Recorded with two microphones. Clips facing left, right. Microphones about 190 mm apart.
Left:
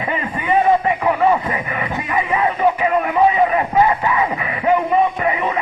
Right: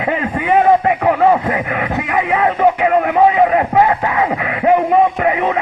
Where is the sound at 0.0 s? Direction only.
75° right (ahead or behind).